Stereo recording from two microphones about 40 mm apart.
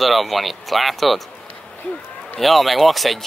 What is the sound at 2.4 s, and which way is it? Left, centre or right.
Speech, centre.